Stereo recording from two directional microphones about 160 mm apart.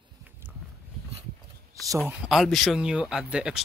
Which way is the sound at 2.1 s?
5° right (ahead or behind).